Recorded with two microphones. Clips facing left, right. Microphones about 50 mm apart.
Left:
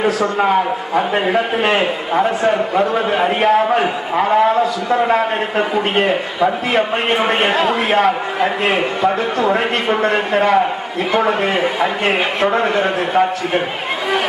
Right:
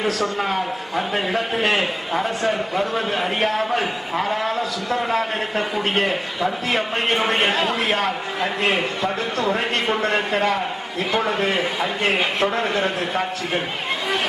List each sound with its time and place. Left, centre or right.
0.0 s a man's voice: centre